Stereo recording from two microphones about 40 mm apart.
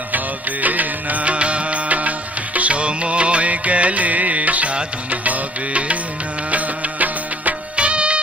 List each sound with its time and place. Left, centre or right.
0.6 s music: right
6.5 s music of bollywood: right
7.8 s music: right